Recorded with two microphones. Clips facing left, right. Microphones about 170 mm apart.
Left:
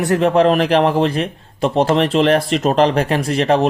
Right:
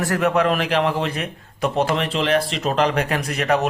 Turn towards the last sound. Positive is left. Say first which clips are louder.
# left 5 dB
turn(degrees=30)  # may be behind; listen again after turning